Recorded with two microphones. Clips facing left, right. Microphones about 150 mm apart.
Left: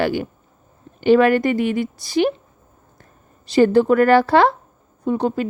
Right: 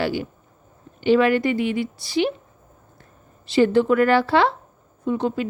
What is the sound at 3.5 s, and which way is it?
Speech, 40° left (ahead or behind).